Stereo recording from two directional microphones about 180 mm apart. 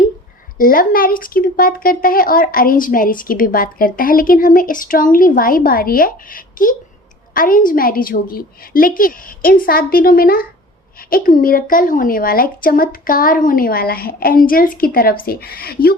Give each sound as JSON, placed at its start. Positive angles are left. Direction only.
{"t": 0.6, "sound": "a woman's voice", "side_deg": 50}